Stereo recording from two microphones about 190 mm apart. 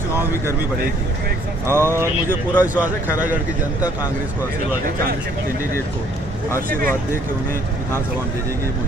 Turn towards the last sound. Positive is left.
turn(degrees=-45)  # may be behind; listen again after turning